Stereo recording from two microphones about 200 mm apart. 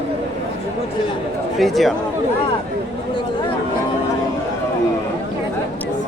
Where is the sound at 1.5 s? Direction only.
Centre (ahead or behind).